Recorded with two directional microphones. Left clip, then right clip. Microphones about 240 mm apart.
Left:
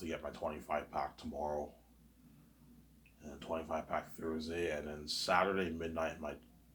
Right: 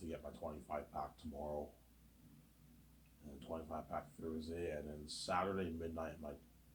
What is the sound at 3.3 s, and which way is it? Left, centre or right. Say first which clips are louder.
Speech: left 8 dB; left.